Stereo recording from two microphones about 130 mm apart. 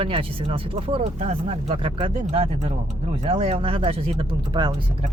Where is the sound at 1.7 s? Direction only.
40° right (ahead or behind).